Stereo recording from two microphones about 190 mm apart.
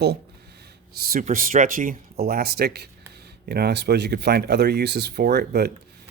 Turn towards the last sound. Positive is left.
turn(degrees=-60)  # may be behind; listen again after turning